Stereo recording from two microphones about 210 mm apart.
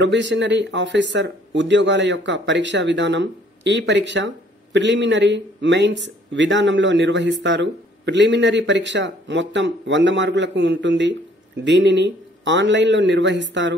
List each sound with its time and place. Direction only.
0.0 s speech: 55° right (ahead or behind)